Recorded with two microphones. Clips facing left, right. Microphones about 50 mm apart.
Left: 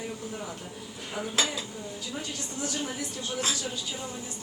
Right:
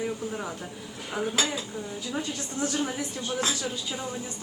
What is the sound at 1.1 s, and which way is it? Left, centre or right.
Speech, centre.